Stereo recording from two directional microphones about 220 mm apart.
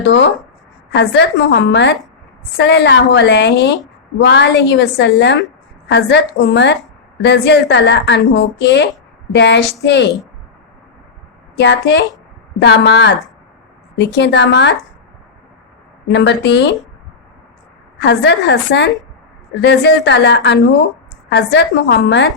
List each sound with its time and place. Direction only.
0.0 s a woman's voice: 55° left (ahead or behind)
11.5 s a woman's voice: 55° left (ahead or behind)
16.1 s a woman's voice: 50° left (ahead or behind)
18.0 s a woman's voice: 50° left (ahead or behind)